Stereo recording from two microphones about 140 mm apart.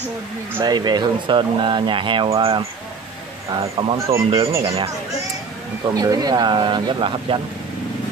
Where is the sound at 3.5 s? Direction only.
30° right (ahead or behind).